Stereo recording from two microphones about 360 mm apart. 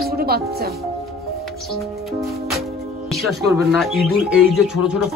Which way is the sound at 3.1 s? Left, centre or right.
Centre.